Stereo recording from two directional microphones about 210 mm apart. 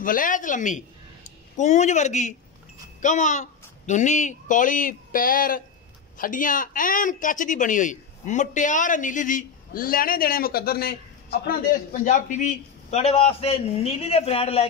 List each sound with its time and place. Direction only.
0.0 s a woman's voice: 40° left (ahead or behind)